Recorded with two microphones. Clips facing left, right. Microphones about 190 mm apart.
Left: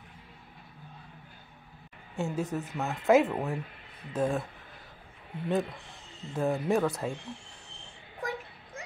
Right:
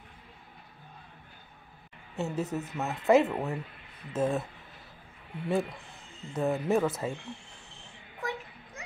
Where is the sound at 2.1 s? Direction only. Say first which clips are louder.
Even; centre (ahead or behind).